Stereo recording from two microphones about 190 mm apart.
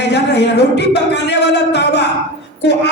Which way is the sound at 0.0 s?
65° left (ahead or behind).